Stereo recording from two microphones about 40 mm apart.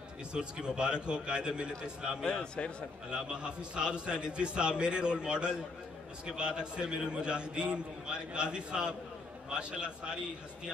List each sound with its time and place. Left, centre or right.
0.3 s a man's voice: right
2.2 s a man's voice: left
3.1 s a man's voice: right